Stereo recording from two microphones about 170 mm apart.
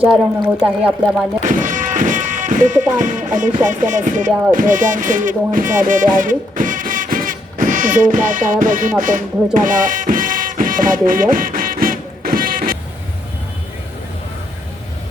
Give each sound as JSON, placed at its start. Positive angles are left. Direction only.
{"t": 0.0, "sound": "speech", "side_deg": -5}
{"t": 1.5, "sound": "speech", "side_deg": -50}
{"t": 9.6, "sound": "music", "side_deg": -50}